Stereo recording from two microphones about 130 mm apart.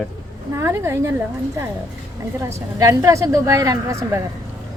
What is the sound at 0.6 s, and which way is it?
A woman's voice, 20° right (ahead or behind).